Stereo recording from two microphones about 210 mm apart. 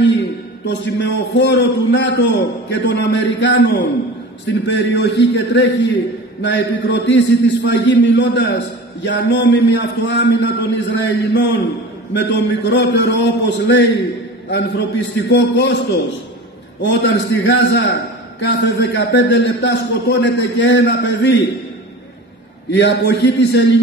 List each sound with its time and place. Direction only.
0.7 s a man's voice: 55° left (ahead or behind)
22.7 s a man's voice: 55° left (ahead or behind)